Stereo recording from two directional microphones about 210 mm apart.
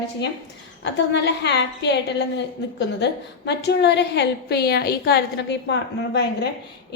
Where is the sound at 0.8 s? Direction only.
55° left (ahead or behind).